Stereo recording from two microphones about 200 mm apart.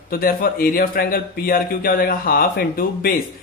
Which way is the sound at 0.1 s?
45° left (ahead or behind).